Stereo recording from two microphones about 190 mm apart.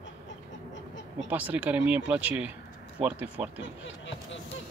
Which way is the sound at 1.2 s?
10° right (ahead or behind).